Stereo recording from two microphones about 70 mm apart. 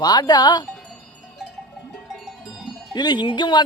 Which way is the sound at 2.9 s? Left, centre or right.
Left.